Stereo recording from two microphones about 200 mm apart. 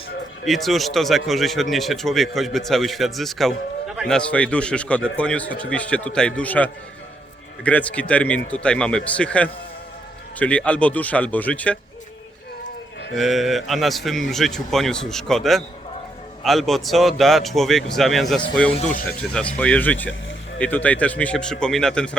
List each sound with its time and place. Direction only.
0.4 s a man's voice: centre (ahead or behind)
13.1 s a man's voice: centre (ahead or behind)
18.8 s speech: 40° left (ahead or behind)
19.0 s speech: 5° left (ahead or behind)